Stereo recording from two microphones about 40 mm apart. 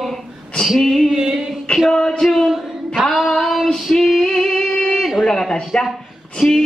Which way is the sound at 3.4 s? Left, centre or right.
Centre.